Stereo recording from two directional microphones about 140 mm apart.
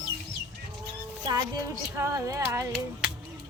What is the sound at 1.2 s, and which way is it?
Speech, 25° right (ahead or behind).